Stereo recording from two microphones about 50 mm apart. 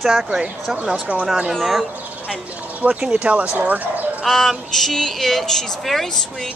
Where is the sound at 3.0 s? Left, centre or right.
Right.